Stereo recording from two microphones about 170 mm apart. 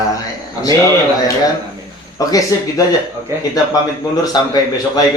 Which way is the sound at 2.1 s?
20° left (ahead or behind).